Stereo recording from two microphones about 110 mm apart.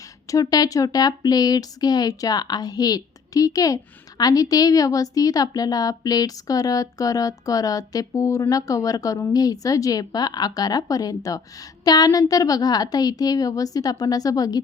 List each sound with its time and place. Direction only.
0.3 s a woman's voice: 35° left (ahead or behind)